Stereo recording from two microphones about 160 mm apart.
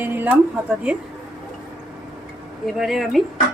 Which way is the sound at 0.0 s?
10° right (ahead or behind).